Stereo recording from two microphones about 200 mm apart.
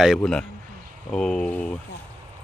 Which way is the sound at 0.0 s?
Centre (ahead or behind).